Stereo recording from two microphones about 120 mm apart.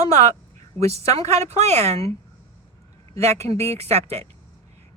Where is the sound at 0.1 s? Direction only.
70° right (ahead or behind).